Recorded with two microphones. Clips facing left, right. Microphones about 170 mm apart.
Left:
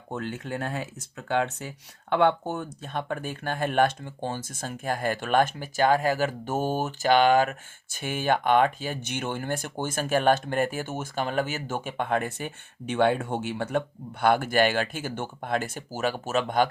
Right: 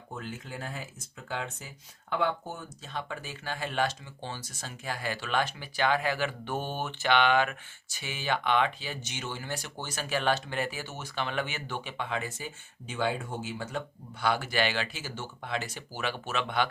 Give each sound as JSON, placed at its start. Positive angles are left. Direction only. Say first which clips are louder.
{"t": 0.1, "sound": "speech", "louder": "left 8 dB", "side_deg": 70}